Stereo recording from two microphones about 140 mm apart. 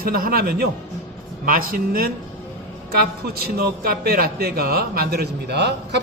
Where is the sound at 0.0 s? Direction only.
90° right.